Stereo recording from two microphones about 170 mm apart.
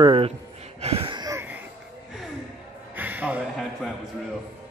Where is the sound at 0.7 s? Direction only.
35° right (ahead or behind).